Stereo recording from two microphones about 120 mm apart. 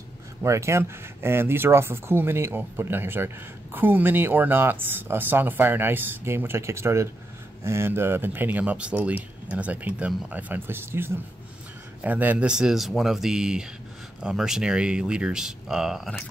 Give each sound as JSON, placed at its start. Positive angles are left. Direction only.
{"t": 0.4, "sound": "speech", "side_deg": -25}